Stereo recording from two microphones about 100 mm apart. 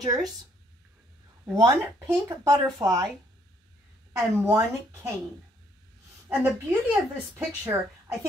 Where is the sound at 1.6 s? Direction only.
40° right (ahead or behind).